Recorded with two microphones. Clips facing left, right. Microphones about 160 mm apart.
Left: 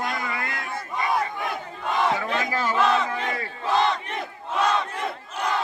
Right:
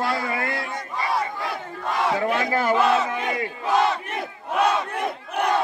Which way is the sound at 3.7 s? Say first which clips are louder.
Right 1 dB; 5° right (ahead or behind).